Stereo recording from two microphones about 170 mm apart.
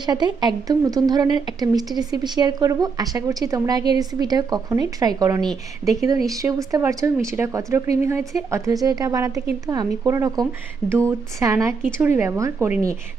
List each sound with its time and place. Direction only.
0.0 s speech: 25° right (ahead or behind)
5.4 s speech: centre (ahead or behind)
6.0 s a woman's voice: 20° right (ahead or behind)